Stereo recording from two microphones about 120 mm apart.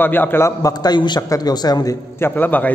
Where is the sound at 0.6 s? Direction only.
30° left (ahead or behind).